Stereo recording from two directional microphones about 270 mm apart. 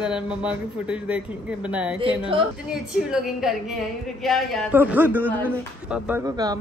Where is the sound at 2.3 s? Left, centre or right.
Centre.